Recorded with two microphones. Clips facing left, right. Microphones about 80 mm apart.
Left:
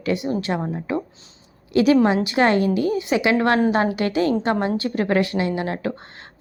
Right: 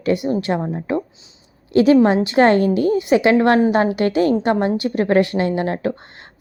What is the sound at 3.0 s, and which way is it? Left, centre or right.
Speech, right.